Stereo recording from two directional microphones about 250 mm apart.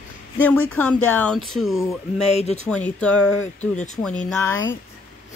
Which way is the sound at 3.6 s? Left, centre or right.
Left.